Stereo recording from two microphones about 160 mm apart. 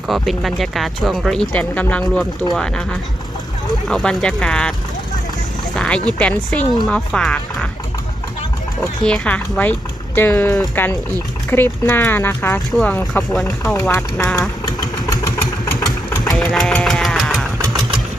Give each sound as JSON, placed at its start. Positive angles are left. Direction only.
{"t": 0.1, "sound": "speech", "side_deg": 0}
{"t": 3.8, "sound": "speech", "side_deg": 0}
{"t": 5.7, "sound": "speech", "side_deg": 5}
{"t": 9.0, "sound": "speech", "side_deg": 5}
{"t": 13.7, "sound": "speech", "side_deg": 20}
{"t": 14.8, "sound": "engine", "side_deg": 25}
{"t": 16.2, "sound": "engine", "side_deg": 5}